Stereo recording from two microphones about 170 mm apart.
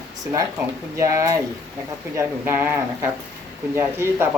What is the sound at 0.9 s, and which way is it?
Speech, 15° right (ahead or behind).